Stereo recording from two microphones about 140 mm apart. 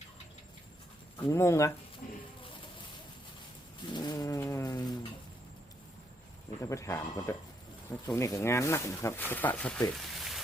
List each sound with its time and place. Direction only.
1.3 s speech: 20° left (ahead or behind)
3.8 s cat: 30° left (ahead or behind)
6.6 s speech: 20° left (ahead or behind)
10.2 s a sound: centre (ahead or behind)